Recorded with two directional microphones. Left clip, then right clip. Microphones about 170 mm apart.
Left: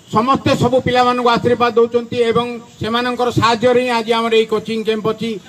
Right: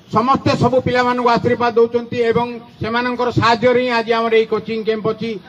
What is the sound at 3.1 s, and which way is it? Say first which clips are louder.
Speech: even; 40° left (ahead or behind).